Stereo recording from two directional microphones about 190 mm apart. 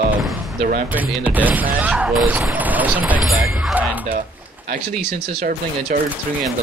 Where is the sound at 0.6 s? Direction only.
45° right (ahead or behind).